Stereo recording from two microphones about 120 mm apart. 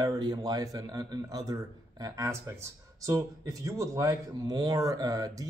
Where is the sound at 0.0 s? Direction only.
30° right (ahead or behind).